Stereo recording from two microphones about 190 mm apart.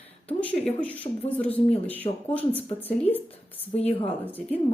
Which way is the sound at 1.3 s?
10° left (ahead or behind).